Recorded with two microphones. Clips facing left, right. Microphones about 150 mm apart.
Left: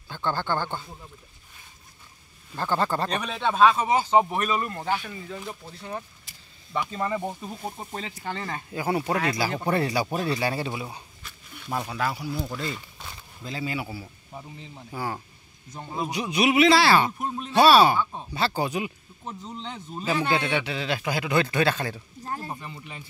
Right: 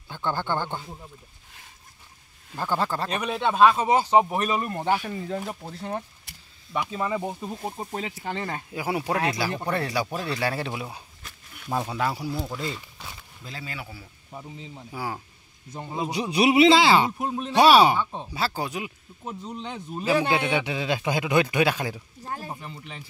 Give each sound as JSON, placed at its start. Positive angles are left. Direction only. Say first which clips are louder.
{"t": 0.1, "sound": "speech", "louder": "even", "side_deg": -15}
{"t": 2.5, "sound": "speech", "louder": "left 1 dB", "side_deg": -5}
{"t": 5.0, "sound": "speech", "louder": "right 5 dB", "side_deg": -40}
{"t": 6.7, "sound": "speech", "louder": "even", "side_deg": -5}
{"t": 7.6, "sound": "speech", "louder": "right 1 dB", "side_deg": -25}
{"t": 7.9, "sound": "speech", "louder": "right 2 dB", "side_deg": -10}
{"t": 9.7, "sound": "speech", "louder": "left 5 dB", "side_deg": 5}
{"t": 11.7, "sound": "speech", "louder": "right 2 dB", "side_deg": -20}
{"t": 13.4, "sound": "speech", "louder": "left 7 dB", "side_deg": 0}
{"t": 14.9, "sound": "speech", "louder": "left 1 dB", "side_deg": -10}
{"t": 16.1, "sound": "speech", "louder": "right 2 dB", "side_deg": -30}
{"t": 18.3, "sound": "speech", "louder": "left 4 dB", "side_deg": -5}
{"t": 19.2, "sound": "speech", "louder": "right 2 dB", "side_deg": -10}
{"t": 22.5, "sound": "speech", "louder": "even", "side_deg": 5}